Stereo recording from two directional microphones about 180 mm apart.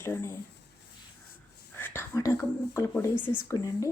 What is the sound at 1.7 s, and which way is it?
Speech, 10° left (ahead or behind).